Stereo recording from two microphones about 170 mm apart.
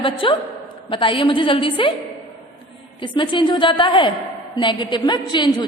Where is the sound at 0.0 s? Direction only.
30° left (ahead or behind).